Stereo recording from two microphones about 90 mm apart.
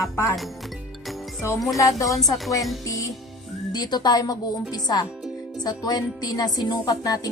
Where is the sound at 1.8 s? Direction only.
40° left (ahead or behind).